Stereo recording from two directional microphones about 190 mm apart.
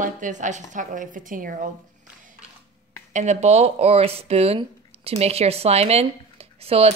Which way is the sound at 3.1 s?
35° right (ahead or behind).